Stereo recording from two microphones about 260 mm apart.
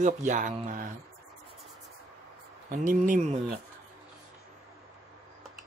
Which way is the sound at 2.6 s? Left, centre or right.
Right.